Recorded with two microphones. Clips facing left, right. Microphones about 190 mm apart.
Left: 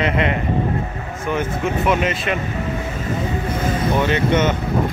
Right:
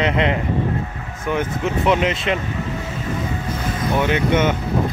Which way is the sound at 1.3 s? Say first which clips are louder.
Even; 20° right (ahead or behind).